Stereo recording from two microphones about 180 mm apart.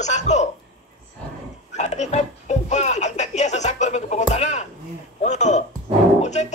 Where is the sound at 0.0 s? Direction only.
40° left (ahead or behind).